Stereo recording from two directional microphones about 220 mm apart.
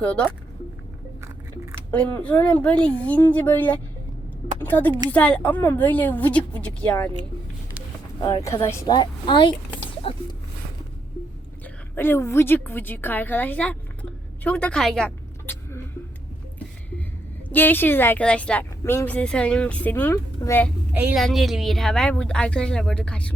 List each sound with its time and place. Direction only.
0.0 s a woman's voice: 5° left (ahead or behind)
2.1 s speech: 10° left (ahead or behind)
8.2 s a woman's voice: 15° left (ahead or behind)
11.6 s a sound: 10° left (ahead or behind)
17.5 s speech: 10° left (ahead or behind)
20.9 s a woman's voice: 5° right (ahead or behind)